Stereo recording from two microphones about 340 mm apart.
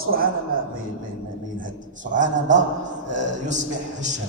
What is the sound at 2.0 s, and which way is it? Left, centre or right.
A man's voice, right.